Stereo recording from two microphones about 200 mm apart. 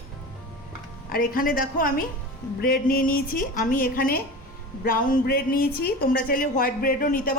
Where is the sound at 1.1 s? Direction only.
45° left (ahead or behind).